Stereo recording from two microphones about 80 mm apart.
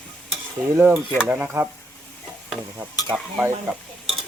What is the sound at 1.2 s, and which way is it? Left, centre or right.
Speech, centre.